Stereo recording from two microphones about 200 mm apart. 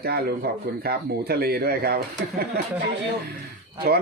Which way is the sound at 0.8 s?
50° right (ahead or behind).